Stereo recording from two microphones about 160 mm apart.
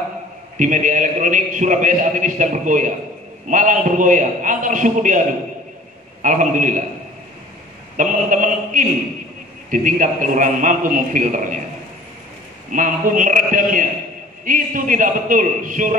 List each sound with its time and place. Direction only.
0.6 s a man's voice: 55° right (ahead or behind)
6.2 s a man's voice: 50° right (ahead or behind)
8.0 s a man's voice: 55° right (ahead or behind)
12.7 s a man's voice: 55° right (ahead or behind)